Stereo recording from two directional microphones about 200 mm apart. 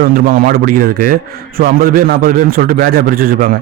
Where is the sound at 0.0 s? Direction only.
50° right (ahead or behind).